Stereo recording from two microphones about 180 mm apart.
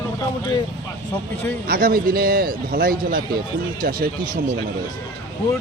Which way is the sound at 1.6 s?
55° right (ahead or behind).